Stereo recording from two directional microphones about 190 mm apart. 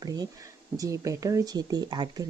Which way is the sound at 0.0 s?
20° right (ahead or behind).